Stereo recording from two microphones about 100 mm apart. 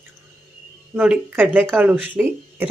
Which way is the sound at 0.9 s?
15° right (ahead or behind).